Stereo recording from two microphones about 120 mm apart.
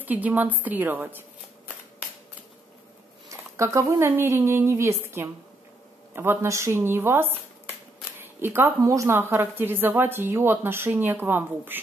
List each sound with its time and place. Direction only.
0.0 s a woman's voice: 15° right (ahead or behind)
3.3 s speech: 25° right (ahead or behind)